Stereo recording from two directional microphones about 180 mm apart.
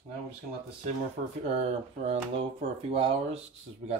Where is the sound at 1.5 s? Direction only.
35° right (ahead or behind).